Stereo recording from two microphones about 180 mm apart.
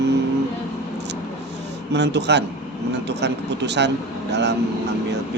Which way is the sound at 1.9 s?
70° right (ahead or behind).